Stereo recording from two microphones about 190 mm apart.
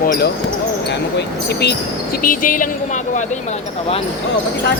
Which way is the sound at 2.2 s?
45° left (ahead or behind).